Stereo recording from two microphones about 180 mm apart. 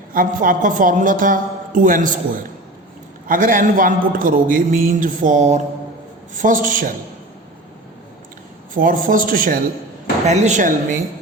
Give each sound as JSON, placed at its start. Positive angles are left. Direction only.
{"t": 0.1, "sound": "a man's voice", "side_deg": -50}
{"t": 3.2, "sound": "a man's voice", "side_deg": -50}
{"t": 8.7, "sound": "a man's voice", "side_deg": -50}
{"t": 10.2, "sound": "speech", "side_deg": -40}